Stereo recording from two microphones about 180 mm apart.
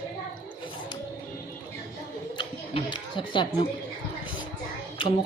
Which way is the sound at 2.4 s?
25° left (ahead or behind).